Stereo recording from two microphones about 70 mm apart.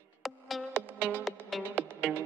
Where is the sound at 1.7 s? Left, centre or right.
Right.